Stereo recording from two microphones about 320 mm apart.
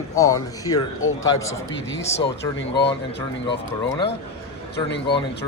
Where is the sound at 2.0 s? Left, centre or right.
Centre.